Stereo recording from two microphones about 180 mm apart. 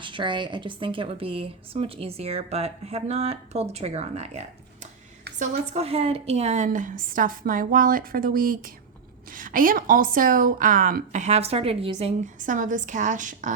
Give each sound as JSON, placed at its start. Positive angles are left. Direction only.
{"t": 0.0, "sound": "a woman's voice", "side_deg": -25}